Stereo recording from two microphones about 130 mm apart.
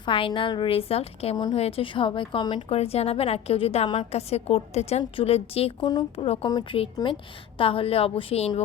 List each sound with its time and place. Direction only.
0.0 s a woman's voice: 40° left (ahead or behind)
2.6 s a woman's voice: 50° left (ahead or behind)
5.8 s a woman's voice: 35° left (ahead or behind)
6.1 s a woman's voice: 50° left (ahead or behind)
6.5 s a woman's voice: 30° left (ahead or behind)
7.6 s a woman's voice: 45° left (ahead or behind)